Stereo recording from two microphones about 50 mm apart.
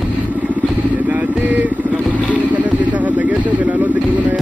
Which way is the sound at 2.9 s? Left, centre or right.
Right.